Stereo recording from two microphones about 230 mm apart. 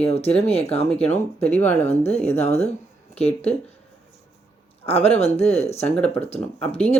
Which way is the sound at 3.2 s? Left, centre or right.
Left.